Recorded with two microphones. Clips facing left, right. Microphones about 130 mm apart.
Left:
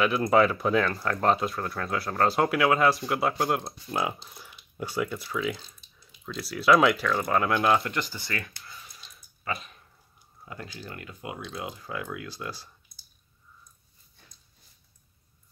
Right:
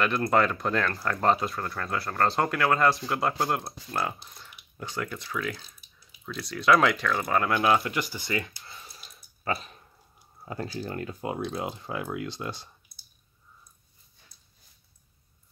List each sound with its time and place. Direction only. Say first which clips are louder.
0.3 s speech: left 4 dB; 5° left (ahead or behind); by 8.5 s 20° right (ahead or behind)
8.6 s a sound: right 1 dB; 30° right (ahead or behind)
9.4 s speech: right 3 dB; 35° right (ahead or behind)